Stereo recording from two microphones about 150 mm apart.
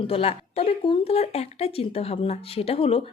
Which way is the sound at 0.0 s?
40° left (ahead or behind).